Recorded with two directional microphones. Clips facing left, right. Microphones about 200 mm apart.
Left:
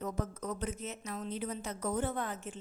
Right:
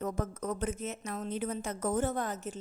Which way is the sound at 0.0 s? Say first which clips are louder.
Right 3 dB; 50° right (ahead or behind).